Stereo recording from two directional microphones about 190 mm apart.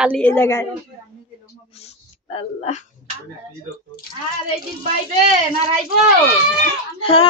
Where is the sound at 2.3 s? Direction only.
35° left (ahead or behind).